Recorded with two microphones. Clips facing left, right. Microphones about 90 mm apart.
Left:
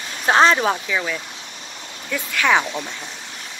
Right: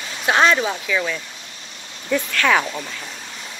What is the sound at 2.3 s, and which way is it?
Speech, 15° left (ahead or behind).